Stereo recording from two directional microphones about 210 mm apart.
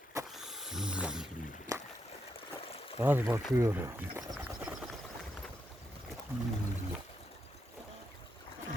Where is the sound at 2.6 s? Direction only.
30° left (ahead or behind).